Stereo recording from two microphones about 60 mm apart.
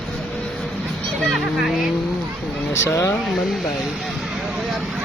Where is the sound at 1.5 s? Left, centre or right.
Centre.